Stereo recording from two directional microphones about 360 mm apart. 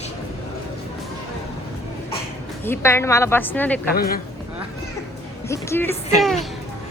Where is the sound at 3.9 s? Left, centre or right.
Left.